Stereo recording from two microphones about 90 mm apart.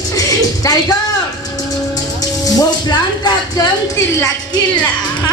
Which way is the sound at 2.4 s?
50° left (ahead or behind).